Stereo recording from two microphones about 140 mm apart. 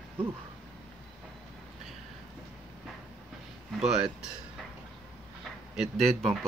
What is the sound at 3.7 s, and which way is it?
Speech, 5° right (ahead or behind).